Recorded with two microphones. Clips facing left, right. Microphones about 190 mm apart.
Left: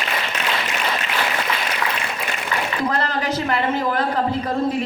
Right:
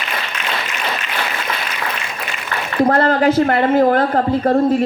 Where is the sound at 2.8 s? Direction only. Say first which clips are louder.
Right 10 dB; 55° right (ahead or behind).